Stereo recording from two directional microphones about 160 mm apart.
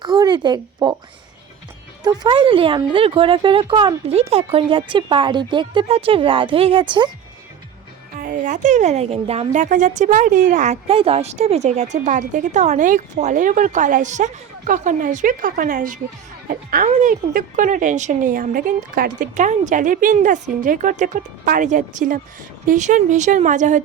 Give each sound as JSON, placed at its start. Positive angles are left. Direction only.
{"t": 0.0, "sound": "speech", "side_deg": -25}
{"t": 2.0, "sound": "speech", "side_deg": -30}
{"t": 8.2, "sound": "a woman's voice", "side_deg": -55}